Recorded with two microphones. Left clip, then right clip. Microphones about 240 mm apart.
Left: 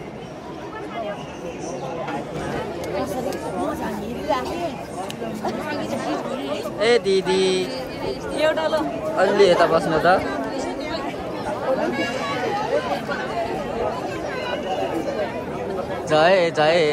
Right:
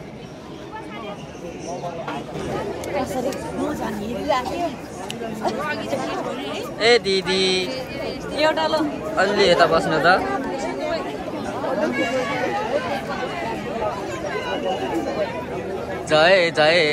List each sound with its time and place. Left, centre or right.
5.7 s speech: centre
6.8 s speech: centre
8.4 s speech: right
9.1 s speech: centre
16.1 s speech: centre